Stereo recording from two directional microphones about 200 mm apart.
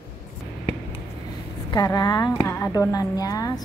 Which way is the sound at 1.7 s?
20° left (ahead or behind).